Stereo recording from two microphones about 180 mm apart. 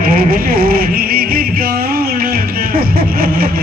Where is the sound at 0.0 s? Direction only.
55° right (ahead or behind).